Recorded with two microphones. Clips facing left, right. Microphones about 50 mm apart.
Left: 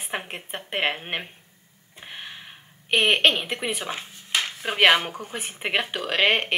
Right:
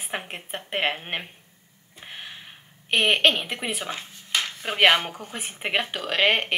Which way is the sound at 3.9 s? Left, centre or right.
Centre.